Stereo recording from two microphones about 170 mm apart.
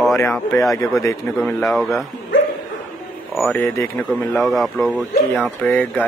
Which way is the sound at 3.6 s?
15° left (ahead or behind).